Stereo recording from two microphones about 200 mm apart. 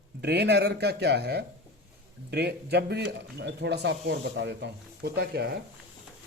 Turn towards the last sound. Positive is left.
turn(degrees=-55)  # may be behind; listen again after turning